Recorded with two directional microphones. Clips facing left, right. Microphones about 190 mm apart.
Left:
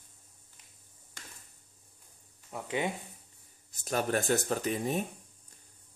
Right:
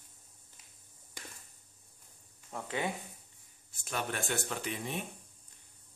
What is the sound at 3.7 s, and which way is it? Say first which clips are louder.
Speech: left 7 dB; 40° left (ahead or behind).